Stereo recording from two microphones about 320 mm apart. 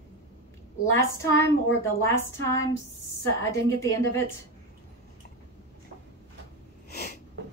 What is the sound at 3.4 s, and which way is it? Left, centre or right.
Speech, centre.